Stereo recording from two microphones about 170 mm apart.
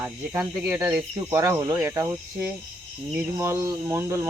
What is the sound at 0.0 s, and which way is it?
Speech, 5° right (ahead or behind).